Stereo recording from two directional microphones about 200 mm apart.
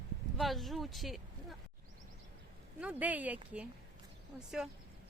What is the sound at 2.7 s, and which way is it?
Speech, 5° right (ahead or behind).